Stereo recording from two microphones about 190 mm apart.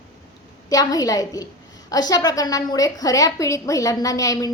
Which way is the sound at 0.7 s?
20° left (ahead or behind).